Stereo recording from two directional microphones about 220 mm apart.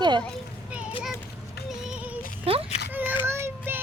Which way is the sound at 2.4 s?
25° right (ahead or behind).